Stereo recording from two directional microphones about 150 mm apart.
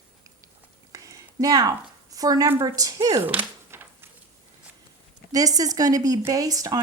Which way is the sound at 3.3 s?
15° right (ahead or behind).